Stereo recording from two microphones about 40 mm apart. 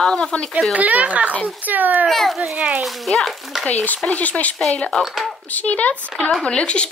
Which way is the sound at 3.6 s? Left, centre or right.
Left.